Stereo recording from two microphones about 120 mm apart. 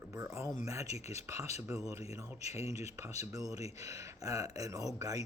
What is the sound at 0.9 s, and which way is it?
Speech, 65° left (ahead or behind).